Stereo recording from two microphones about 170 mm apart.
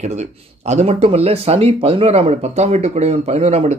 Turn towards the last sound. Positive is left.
turn(degrees=-40)  # may be behind; listen again after turning